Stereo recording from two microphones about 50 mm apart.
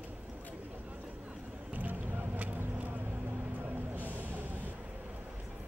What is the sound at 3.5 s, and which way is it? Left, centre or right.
Music, right.